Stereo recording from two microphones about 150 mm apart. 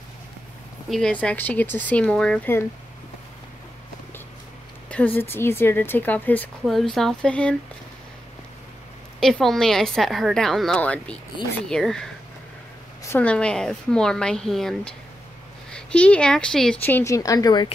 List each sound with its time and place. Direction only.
0.8 s speech: 5° left (ahead or behind)
4.8 s speech: 10° left (ahead or behind)
6.6 s a woman's voice: centre (ahead or behind)
9.2 s a woman's voice: centre (ahead or behind)
16.8 s a woman's voice: 15° left (ahead or behind)